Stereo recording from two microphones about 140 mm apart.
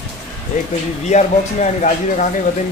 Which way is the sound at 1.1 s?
55° left (ahead or behind).